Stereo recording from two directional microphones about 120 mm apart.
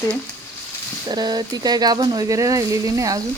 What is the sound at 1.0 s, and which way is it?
Speech, 35° right (ahead or behind).